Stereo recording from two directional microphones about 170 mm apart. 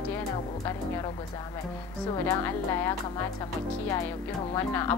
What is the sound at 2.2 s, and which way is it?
Speech, 15° left (ahead or behind).